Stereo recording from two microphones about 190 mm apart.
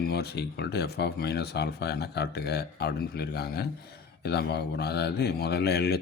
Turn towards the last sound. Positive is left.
turn(degrees=55)  # may be behind; listen again after turning